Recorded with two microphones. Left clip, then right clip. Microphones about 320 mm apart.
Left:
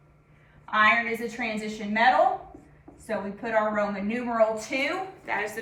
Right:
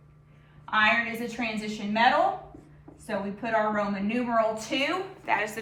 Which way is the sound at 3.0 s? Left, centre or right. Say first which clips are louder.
Left 1 dB; centre.